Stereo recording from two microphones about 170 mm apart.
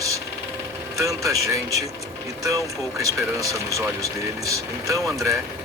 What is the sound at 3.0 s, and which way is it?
Speech, 20° right (ahead or behind).